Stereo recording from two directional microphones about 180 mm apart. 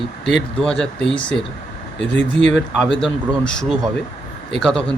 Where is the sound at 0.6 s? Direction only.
5° left (ahead or behind).